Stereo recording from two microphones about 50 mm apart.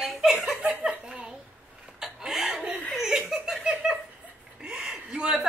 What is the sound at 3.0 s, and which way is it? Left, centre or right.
Laughter, centre.